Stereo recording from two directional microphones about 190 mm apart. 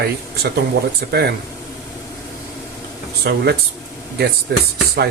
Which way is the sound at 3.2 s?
60° right (ahead or behind).